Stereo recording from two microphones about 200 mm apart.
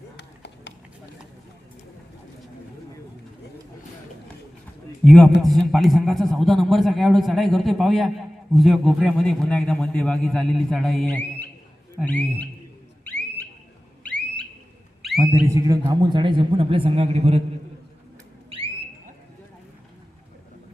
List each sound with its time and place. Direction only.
0.2 s run: 60° left (ahead or behind)
5.0 s a man's voice: centre (ahead or behind)
14.0 s a sound: 5° left (ahead or behind)
15.2 s speech: 10° right (ahead or behind); by 17.4 s 30° right (ahead or behind)